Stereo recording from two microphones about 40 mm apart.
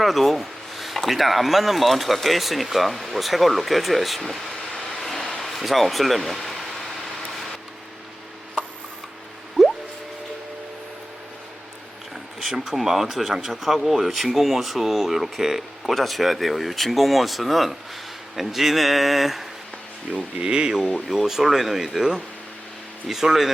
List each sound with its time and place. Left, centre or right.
0.0 s speech: centre
4.9 s a sound: centre
12.1 s speech: centre
16.0 s speech: centre
20.4 s speech: right
21.1 s speech: centre
23.0 s speech: centre